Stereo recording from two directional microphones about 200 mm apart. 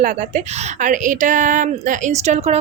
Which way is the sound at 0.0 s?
40° right (ahead or behind).